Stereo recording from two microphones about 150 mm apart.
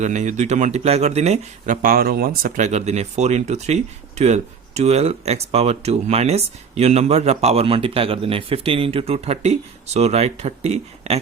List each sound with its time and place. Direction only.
0.0 s speech: 50° right (ahead or behind); by 2.5 s 85° right
2.6 s speech: 50° right (ahead or behind)